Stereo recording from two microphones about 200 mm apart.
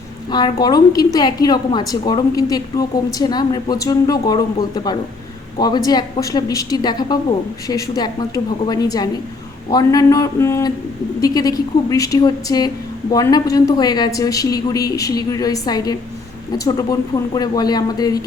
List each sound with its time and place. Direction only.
0.3 s a woman's voice: 20° left (ahead or behind)